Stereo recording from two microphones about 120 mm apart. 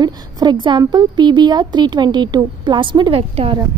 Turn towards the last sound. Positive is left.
turn(degrees=-50)  # may be behind; listen again after turning